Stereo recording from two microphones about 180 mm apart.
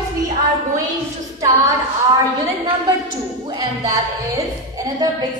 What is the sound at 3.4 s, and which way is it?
A woman's voice, 20° right (ahead or behind).